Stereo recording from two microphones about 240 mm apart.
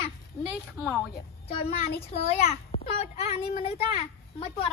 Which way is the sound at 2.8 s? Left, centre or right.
Left.